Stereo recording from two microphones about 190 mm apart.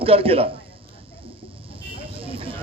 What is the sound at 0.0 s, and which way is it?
Speech, 30° right (ahead or behind).